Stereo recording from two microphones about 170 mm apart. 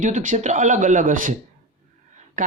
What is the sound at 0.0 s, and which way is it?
Speech, 45° right (ahead or behind).